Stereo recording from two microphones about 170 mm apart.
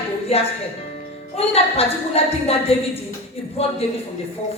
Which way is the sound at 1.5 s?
35° left (ahead or behind).